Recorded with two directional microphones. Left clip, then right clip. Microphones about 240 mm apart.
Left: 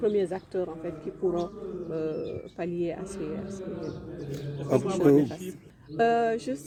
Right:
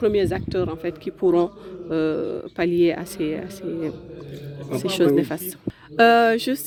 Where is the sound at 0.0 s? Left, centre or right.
Right.